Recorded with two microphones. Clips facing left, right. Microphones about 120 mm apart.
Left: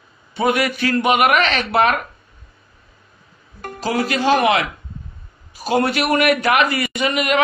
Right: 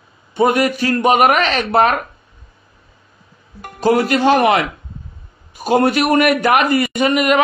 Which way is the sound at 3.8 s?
50° right (ahead or behind).